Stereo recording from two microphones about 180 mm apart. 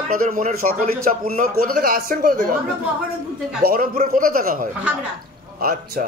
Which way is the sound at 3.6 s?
55° right (ahead or behind).